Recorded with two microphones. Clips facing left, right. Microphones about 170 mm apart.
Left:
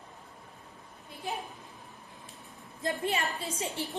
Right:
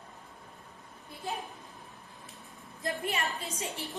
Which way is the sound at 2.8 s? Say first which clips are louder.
Left 2 dB; 25° left (ahead or behind).